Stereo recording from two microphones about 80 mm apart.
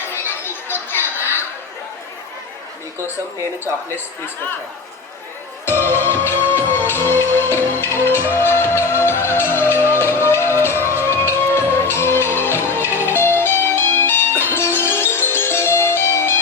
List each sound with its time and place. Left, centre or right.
0.1 s chatter: left
5.6 s music: left